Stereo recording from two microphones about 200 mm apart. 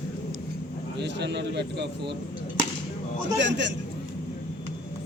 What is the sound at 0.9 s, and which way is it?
Speech, 60° right (ahead or behind).